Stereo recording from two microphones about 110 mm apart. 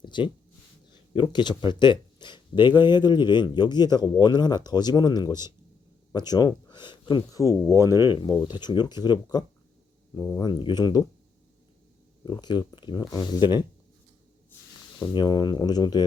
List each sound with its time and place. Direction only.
0.0 s a sound: 45° left (ahead or behind)
1.1 s speech: 45° left (ahead or behind)
5.3 s speech: 25° right (ahead or behind)
6.1 s speech: 40° left (ahead or behind)
7.7 s speech: 25° right (ahead or behind)
8.1 s speech: 40° left (ahead or behind)
12.2 s speech: 45° left (ahead or behind)
15.0 s speech: 40° left (ahead or behind)